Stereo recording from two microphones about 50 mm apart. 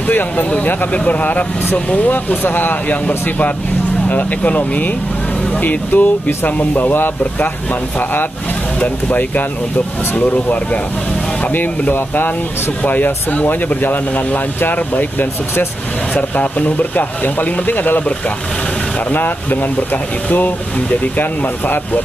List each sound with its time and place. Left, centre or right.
0.1 s speech: left
8.8 s speech: left
19.1 s speech: left